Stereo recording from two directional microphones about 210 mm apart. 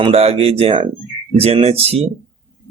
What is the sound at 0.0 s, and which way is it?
A man's voice, 30° right (ahead or behind).